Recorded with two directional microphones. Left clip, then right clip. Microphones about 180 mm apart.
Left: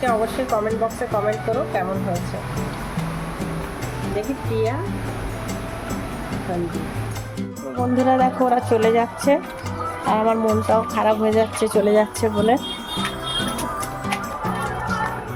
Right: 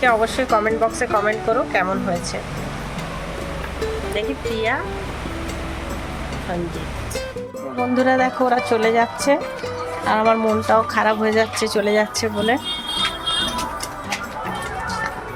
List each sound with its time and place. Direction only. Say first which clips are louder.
0.0 s speech: right 4 dB; centre (ahead or behind)
7.9 s speech: even; 5° right (ahead or behind)
11.6 s speech: left 1 dB; 20° left (ahead or behind)